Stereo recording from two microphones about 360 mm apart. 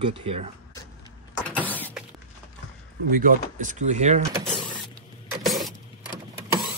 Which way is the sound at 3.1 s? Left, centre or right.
Right.